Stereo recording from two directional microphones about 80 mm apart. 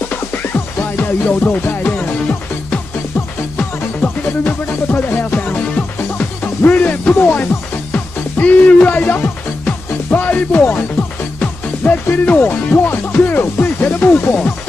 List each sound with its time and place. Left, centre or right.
0.1 s music: left
3.5 s music: left